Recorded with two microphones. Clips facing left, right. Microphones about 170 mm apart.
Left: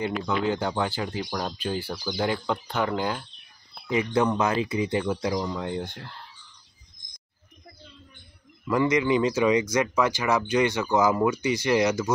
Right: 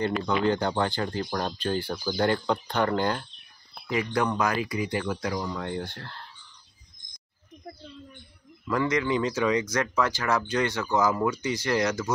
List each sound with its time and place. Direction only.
0.4 s speech: 5° left (ahead or behind)
3.9 s speech: 20° left (ahead or behind)
8.6 s speech: 15° left (ahead or behind)